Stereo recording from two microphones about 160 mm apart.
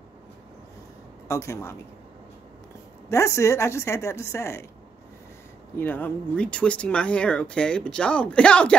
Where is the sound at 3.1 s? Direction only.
20° left (ahead or behind).